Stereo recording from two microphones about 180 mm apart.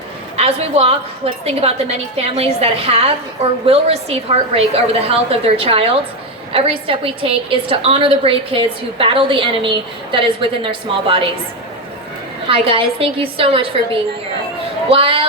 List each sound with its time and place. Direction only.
0.3 s a woman's voice: 35° right (ahead or behind)
12.5 s a woman's voice: 30° right (ahead or behind)
14.8 s a woman's voice: 30° right (ahead or behind)